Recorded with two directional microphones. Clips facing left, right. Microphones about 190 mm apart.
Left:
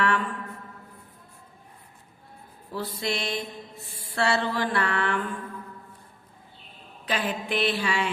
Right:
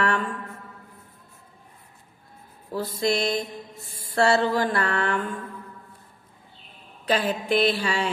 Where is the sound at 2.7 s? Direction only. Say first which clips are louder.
Right 5 dB; 40° right (ahead or behind).